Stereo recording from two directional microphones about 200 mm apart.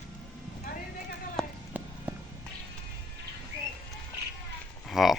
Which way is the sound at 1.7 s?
10° right (ahead or behind).